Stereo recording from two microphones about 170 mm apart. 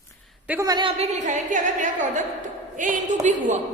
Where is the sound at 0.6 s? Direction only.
25° right (ahead or behind).